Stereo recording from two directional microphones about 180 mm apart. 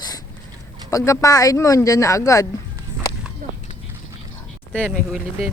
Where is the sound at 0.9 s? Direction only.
15° left (ahead or behind).